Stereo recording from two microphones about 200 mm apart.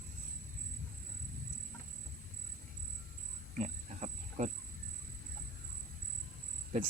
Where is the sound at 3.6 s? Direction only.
35° right (ahead or behind).